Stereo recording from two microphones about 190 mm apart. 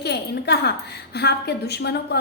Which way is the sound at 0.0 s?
60° left (ahead or behind).